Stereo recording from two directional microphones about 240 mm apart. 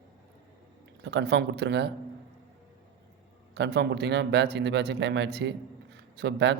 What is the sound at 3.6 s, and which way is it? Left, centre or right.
A man's voice, right.